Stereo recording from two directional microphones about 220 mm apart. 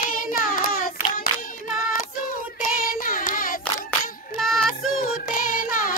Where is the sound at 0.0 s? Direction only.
40° left (ahead or behind).